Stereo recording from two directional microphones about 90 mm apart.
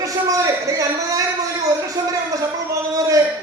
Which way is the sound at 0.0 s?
40° right (ahead or behind).